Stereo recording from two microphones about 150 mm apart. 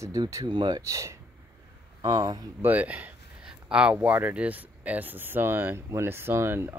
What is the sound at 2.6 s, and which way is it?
Speech, 10° right (ahead or behind).